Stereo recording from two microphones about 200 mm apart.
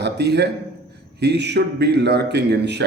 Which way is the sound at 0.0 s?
55° right (ahead or behind).